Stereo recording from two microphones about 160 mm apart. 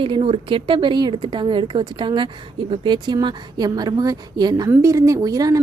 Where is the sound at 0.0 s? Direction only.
35° right (ahead or behind).